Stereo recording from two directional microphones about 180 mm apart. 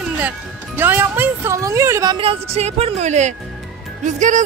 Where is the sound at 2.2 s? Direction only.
35° right (ahead or behind).